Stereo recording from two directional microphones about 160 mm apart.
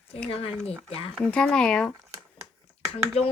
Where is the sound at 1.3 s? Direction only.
5° left (ahead or behind).